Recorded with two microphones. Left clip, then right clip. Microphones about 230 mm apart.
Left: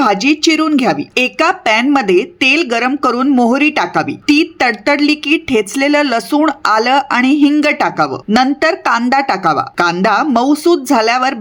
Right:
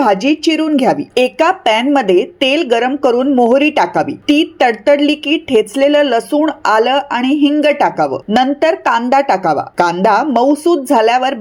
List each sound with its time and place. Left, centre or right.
0.0 s speech: centre